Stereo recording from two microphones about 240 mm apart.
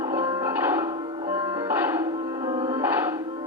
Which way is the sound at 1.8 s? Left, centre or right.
Centre.